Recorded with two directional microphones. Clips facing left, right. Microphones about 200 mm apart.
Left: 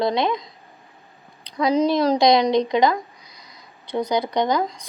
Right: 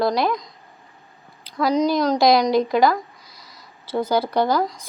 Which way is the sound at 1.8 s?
30° left (ahead or behind).